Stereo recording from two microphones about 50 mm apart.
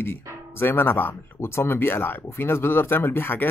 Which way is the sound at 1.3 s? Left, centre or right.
Left.